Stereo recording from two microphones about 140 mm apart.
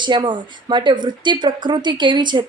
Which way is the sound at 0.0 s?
35° right (ahead or behind).